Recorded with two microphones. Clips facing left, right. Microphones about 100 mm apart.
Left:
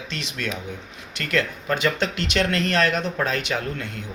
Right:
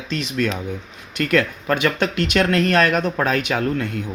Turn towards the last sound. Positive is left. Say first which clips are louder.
# right 7 dB
turn(degrees=-50)  # may be behind; listen again after turning